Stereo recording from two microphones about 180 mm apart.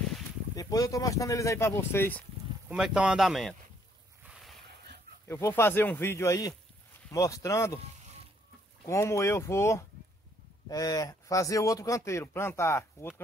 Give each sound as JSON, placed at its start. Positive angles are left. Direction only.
{"t": 0.6, "sound": "speech", "side_deg": 20}
{"t": 2.7, "sound": "speech", "side_deg": -5}
{"t": 4.3, "sound": "a sound", "side_deg": 0}
{"t": 5.3, "sound": "speech", "side_deg": 15}
{"t": 8.8, "sound": "speech", "side_deg": 15}